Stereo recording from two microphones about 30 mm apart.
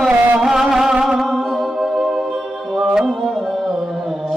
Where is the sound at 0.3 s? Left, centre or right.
Centre.